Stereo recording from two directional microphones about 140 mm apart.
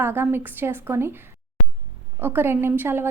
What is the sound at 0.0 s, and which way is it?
A woman's voice, 15° right (ahead or behind).